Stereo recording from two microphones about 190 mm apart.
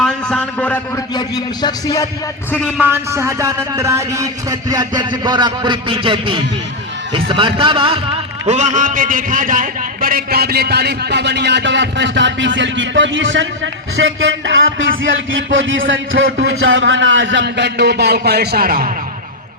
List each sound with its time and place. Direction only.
0.0 s a sound: 5° left (ahead or behind)
1.6 s speech: 20° left (ahead or behind)
2.5 s a man's voice: 5° left (ahead or behind)
2.8 s a man's voice: 10° right (ahead or behind)
8.4 s a man's voice: 40° right (ahead or behind); by 13.5 s 75° right (ahead or behind)
13.9 s a man's voice: 90° right; by 18.9 s 50° right (ahead or behind)